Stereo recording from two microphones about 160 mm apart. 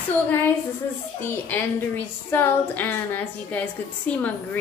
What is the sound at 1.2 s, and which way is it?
A woman's voice, 10° left (ahead or behind).